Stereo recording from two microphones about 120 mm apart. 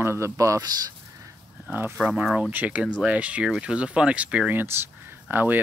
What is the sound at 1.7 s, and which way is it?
Speech, 15° right (ahead or behind).